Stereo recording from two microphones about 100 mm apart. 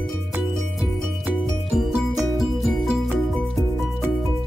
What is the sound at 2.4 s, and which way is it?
Music, centre (ahead or behind).